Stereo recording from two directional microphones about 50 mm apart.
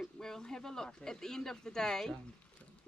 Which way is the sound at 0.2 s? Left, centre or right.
Centre.